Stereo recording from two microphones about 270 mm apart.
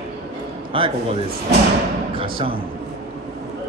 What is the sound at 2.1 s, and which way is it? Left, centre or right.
Speech, centre.